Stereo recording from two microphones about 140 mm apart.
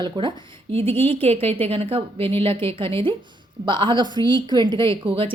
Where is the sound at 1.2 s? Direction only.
45° right (ahead or behind).